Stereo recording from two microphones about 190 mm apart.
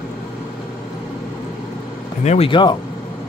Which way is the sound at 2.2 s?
35° left (ahead or behind).